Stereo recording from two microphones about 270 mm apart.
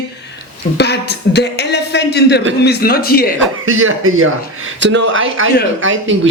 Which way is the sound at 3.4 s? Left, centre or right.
Right.